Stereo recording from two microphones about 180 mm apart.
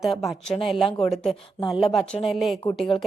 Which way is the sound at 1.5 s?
25° left (ahead or behind).